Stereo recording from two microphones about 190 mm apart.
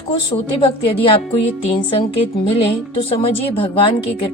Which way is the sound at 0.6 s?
30° left (ahead or behind).